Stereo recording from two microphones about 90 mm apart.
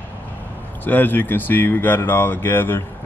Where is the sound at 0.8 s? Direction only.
20° left (ahead or behind).